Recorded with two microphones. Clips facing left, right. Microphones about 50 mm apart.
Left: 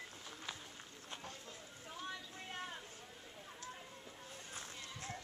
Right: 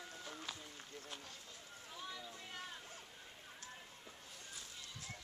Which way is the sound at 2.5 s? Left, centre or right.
Left.